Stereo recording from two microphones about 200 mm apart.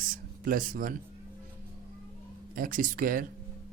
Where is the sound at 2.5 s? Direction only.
45° right (ahead or behind).